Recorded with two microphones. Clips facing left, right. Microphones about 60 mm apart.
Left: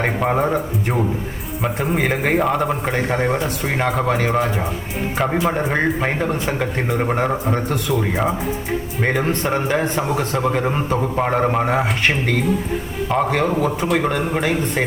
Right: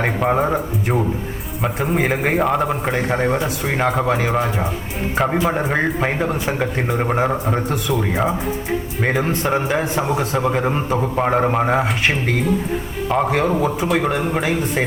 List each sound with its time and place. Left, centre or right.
0.0 s a man's voice: centre
10.1 s a man's voice: right
10.4 s a man's voice: centre